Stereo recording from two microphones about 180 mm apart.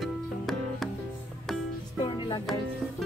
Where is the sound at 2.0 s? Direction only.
25° left (ahead or behind).